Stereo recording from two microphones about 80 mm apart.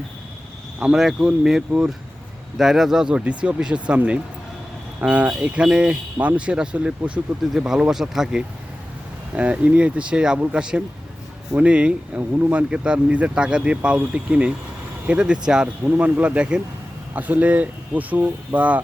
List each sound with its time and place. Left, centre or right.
0.8 s speech: centre
2.6 s speech: centre
15.8 s speech: right